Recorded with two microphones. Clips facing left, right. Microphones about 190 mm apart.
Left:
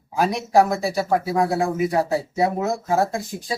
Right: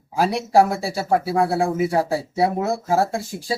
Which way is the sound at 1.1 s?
10° right (ahead or behind).